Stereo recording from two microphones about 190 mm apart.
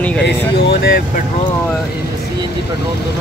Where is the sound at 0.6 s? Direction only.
55° left (ahead or behind).